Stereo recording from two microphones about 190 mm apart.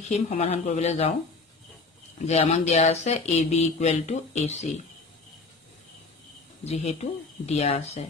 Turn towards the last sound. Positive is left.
turn(degrees=35)  # may be behind; listen again after turning